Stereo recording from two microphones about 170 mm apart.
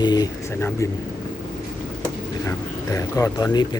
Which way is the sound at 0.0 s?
25° left (ahead or behind).